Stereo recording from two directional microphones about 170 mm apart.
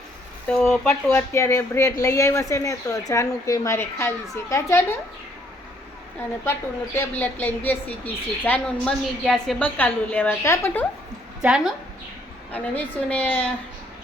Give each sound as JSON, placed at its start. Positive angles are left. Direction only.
{"t": 0.4, "sound": "speech", "side_deg": 5}
{"t": 1.1, "sound": "a woman's voice", "side_deg": 15}
{"t": 6.4, "sound": "a woman's voice", "side_deg": 15}
{"t": 11.4, "sound": "speech", "side_deg": -5}
{"t": 12.5, "sound": "a woman's voice", "side_deg": 10}